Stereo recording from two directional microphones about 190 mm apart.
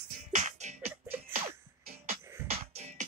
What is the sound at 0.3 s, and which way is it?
Music, 40° right (ahead or behind).